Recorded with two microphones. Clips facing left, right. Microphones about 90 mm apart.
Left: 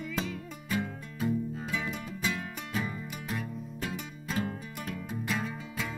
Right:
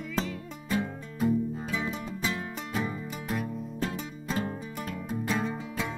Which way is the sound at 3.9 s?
30° right (ahead or behind).